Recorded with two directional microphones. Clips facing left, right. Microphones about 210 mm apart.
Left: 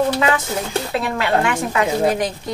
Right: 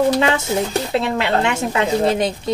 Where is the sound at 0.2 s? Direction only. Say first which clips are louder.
Right 2 dB; 25° right (ahead or behind).